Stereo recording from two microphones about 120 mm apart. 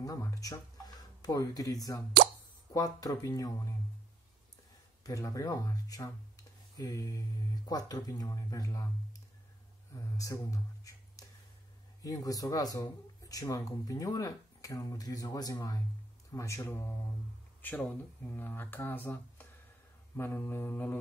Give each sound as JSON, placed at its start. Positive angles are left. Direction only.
{"t": 0.0, "sound": "speech", "side_deg": 30}
{"t": 5.0, "sound": "speech", "side_deg": 30}
{"t": 9.9, "sound": "a sound", "side_deg": 30}
{"t": 12.0, "sound": "speech", "side_deg": 30}